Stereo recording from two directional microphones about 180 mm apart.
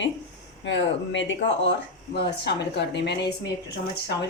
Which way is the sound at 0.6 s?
85° left.